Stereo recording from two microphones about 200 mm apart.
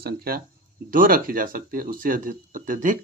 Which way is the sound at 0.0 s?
50° right (ahead or behind).